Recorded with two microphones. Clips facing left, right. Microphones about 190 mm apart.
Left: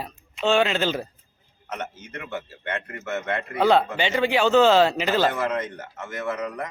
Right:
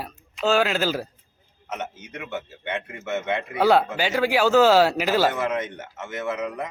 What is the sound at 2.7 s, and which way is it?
Speech, 15° right (ahead or behind).